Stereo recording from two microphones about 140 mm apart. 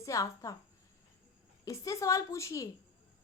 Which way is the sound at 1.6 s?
25° left (ahead or behind).